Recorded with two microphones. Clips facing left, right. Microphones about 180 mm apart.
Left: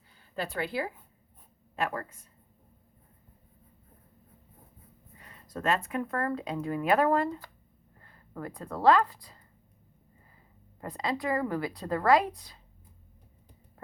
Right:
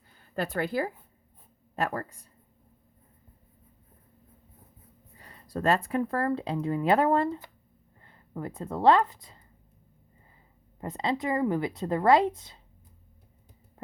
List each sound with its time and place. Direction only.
0.3 s speech: 45° right (ahead or behind)
5.1 s speech: 35° right (ahead or behind)
10.8 s speech: 25° right (ahead or behind)
13.8 s a sound: 25° right (ahead or behind)